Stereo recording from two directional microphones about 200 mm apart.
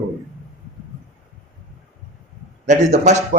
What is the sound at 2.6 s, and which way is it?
Speech, 35° right (ahead or behind).